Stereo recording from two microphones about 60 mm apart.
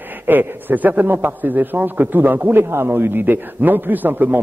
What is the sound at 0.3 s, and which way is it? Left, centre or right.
A man's voice, right.